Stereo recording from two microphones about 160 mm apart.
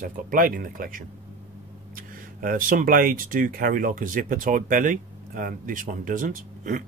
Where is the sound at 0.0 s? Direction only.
60° right (ahead or behind).